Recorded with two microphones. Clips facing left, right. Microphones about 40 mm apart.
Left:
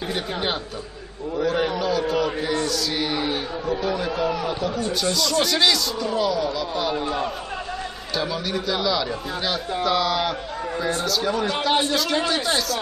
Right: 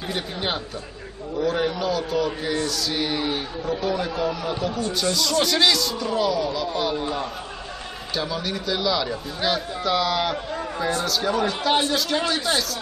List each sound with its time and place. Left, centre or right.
0.1 s a man's voice: centre